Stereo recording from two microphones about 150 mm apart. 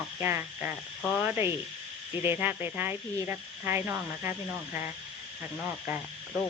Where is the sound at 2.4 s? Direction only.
10° right (ahead or behind).